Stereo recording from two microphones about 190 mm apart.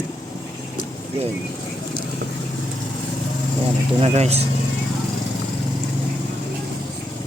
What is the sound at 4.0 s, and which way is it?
Speech, 35° right (ahead or behind).